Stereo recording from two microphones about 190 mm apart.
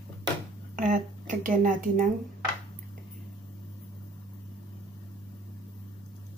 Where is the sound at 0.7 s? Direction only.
40° right (ahead or behind).